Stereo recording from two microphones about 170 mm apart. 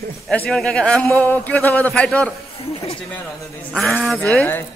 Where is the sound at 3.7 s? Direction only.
Centre (ahead or behind).